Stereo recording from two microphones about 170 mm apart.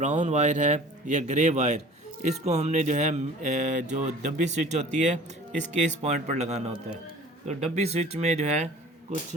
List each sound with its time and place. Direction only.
0.0 s music: 45° right (ahead or behind)
7.4 s speech: 40° right (ahead or behind)